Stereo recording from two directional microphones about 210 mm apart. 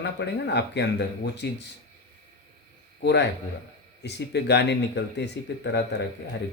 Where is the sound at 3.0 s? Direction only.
55° left (ahead or behind).